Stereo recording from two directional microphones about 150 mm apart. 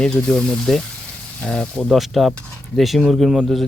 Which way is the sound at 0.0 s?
5° left (ahead or behind).